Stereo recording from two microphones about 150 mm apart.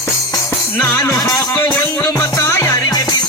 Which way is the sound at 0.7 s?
10° left (ahead or behind).